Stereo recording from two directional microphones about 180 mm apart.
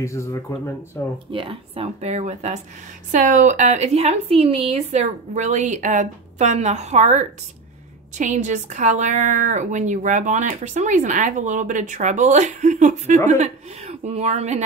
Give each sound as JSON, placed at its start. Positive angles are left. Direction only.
{"t": 0.0, "sound": "speech", "side_deg": 15}
{"t": 1.3, "sound": "a woman's voice", "side_deg": -30}